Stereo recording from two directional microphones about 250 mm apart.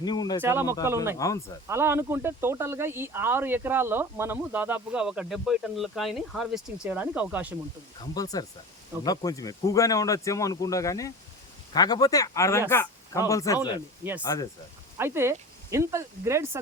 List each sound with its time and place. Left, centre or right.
0.0 s speech: centre
0.4 s speech: centre
1.2 s speech: centre
1.6 s speech: centre
8.1 s speech: centre
14.9 s speech: centre